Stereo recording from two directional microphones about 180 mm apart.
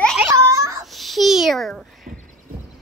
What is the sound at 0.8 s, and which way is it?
A child's voice, centre (ahead or behind).